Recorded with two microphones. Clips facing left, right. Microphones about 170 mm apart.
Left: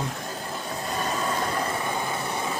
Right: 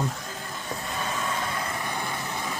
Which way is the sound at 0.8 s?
40° left (ahead or behind).